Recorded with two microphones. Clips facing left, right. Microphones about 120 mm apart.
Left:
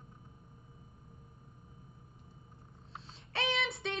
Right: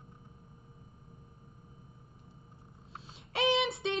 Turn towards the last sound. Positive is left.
turn(degrees=-25)  # may be behind; listen again after turning